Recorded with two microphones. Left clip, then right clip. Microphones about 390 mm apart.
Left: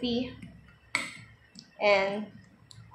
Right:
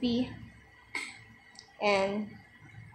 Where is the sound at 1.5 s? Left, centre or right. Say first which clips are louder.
Left 4 dB; right.